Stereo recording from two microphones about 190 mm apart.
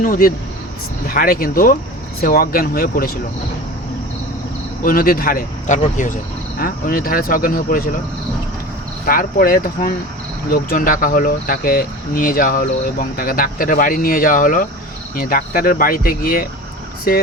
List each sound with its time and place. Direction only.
0.0 s speech: 50° left (ahead or behind)
4.8 s speech: 50° left (ahead or behind)
9.0 s speech: 50° left (ahead or behind)